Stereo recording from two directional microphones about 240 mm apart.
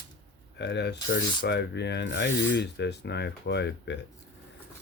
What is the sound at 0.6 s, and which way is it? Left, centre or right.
Speech, left.